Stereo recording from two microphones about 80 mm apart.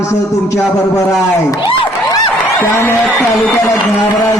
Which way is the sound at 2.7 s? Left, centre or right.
Left.